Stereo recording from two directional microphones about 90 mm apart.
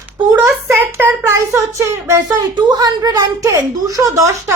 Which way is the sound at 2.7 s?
45° right (ahead or behind).